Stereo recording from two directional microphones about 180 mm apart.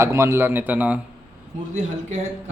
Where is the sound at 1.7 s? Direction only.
40° right (ahead or behind).